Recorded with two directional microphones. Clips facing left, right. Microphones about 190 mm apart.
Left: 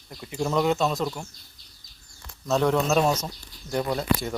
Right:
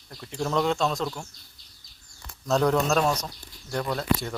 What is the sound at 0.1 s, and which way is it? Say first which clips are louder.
Speech: left 1 dB; 5° left (ahead or behind).